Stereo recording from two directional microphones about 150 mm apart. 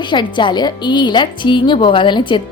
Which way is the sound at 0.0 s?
30° left (ahead or behind).